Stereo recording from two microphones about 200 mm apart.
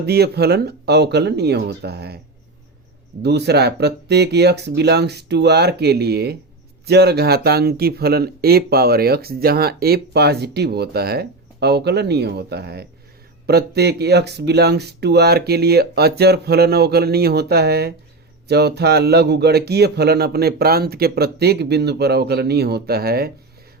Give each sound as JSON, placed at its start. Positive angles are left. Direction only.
{"t": 0.0, "sound": "speech", "side_deg": -55}
{"t": 3.2, "sound": "speech", "side_deg": -55}